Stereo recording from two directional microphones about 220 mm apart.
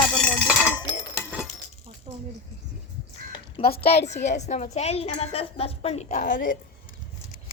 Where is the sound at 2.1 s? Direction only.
25° right (ahead or behind).